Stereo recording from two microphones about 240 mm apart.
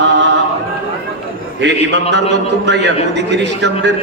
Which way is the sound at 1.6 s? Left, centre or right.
Right.